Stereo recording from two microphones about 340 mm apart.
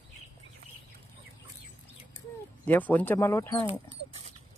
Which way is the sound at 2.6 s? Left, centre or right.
Centre.